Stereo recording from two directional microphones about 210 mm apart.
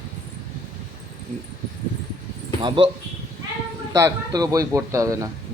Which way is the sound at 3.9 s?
20° right (ahead or behind).